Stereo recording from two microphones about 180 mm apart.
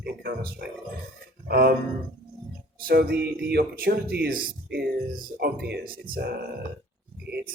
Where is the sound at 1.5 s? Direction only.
60° right (ahead or behind).